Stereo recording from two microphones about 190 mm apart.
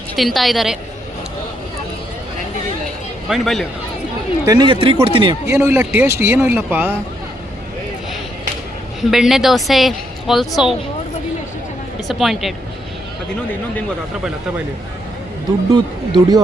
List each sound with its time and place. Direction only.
0.2 s a woman's voice: centre (ahead or behind)
3.2 s a woman's voice: centre (ahead or behind)
4.4 s speech: 25° right (ahead or behind)
5.5 s a man's voice: 15° right (ahead or behind)
9.0 s a woman's voice: centre (ahead or behind)
12.0 s a woman's voice: centre (ahead or behind)
15.7 s speech: 20° right (ahead or behind)